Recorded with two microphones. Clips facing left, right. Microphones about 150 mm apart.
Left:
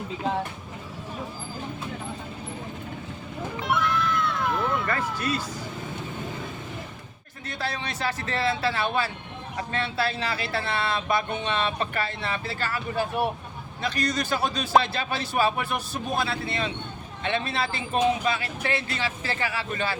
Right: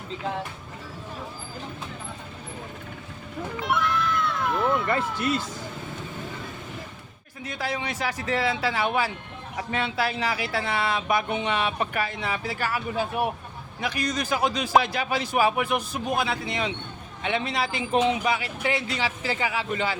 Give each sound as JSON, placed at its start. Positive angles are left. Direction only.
{"t": 3.6, "sound": "music", "side_deg": 0}
{"t": 5.1, "sound": "speech", "side_deg": -20}
{"t": 7.4, "sound": "speech", "side_deg": -10}